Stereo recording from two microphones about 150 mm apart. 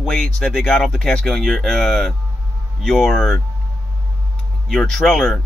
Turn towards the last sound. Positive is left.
turn(degrees=5)  # may be behind; listen again after turning